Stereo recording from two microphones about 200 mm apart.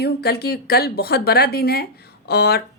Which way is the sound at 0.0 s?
55° left (ahead or behind).